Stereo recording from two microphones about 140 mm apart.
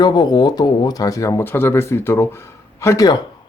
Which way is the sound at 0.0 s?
30° left (ahead or behind).